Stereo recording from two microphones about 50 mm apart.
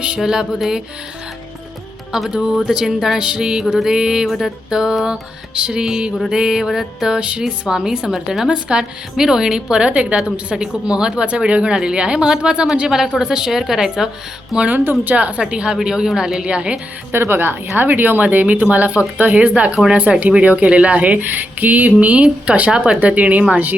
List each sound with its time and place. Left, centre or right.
0.2 s a woman's voice: centre
2.1 s a woman's voice: centre
5.5 s a woman's voice: centre
7.2 s a woman's voice: right
14.7 s speech: right
17.1 s a woman's voice: right
19.2 s a woman's voice: right